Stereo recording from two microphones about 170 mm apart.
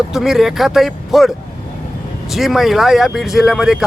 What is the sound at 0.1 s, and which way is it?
Speech, centre (ahead or behind).